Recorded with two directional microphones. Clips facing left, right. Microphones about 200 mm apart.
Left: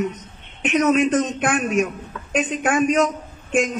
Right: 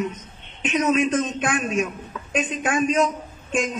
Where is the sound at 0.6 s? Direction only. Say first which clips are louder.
Left 4 dB; 60° left (ahead or behind).